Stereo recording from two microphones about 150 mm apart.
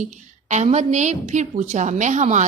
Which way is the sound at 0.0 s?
55° right (ahead or behind).